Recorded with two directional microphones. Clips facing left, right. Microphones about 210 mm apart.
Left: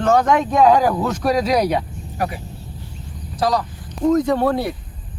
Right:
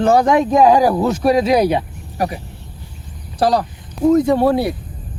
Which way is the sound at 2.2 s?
35° right (ahead or behind).